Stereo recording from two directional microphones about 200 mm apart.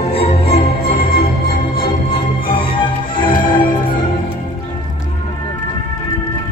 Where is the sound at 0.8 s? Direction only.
50° left (ahead or behind).